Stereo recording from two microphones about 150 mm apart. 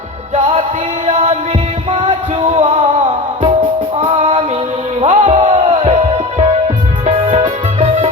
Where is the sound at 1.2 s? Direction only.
35° right (ahead or behind).